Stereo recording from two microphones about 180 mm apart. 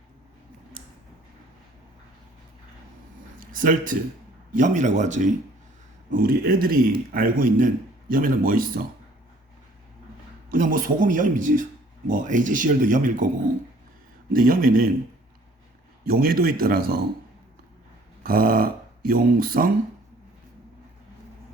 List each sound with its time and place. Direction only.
3.5 s speech: 50° right (ahead or behind)
6.1 s speech: 55° right (ahead or behind)
10.5 s speech: 50° right (ahead or behind)
14.3 s speech: 50° right (ahead or behind)
16.0 s speech: 55° right (ahead or behind)
18.2 s speech: 50° right (ahead or behind)